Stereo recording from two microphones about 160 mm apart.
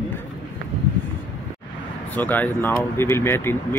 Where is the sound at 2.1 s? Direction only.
10° left (ahead or behind).